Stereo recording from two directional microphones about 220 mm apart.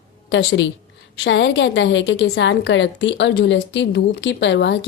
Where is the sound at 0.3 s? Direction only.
55° left (ahead or behind).